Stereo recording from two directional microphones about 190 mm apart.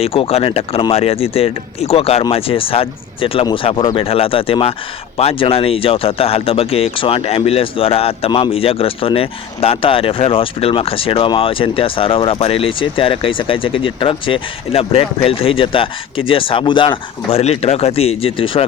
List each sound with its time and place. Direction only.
0.0 s speech: 30° left (ahead or behind)